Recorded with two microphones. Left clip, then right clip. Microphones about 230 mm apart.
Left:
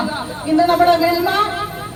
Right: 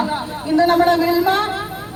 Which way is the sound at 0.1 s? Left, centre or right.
Right.